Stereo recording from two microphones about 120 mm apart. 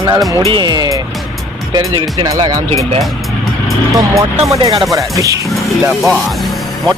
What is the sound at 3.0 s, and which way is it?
Vehicle, centre (ahead or behind).